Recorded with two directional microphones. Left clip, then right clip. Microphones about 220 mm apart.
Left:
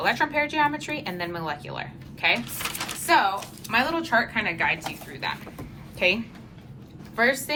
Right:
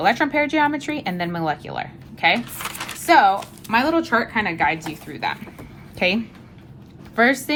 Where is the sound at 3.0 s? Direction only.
30° right (ahead or behind).